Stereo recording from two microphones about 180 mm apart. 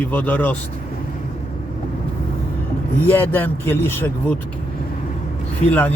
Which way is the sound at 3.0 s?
10° left (ahead or behind).